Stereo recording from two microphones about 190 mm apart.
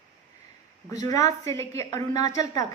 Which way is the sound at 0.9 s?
20° left (ahead or behind).